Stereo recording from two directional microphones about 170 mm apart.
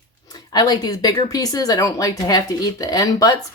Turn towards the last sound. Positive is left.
turn(degrees=20)  # may be behind; listen again after turning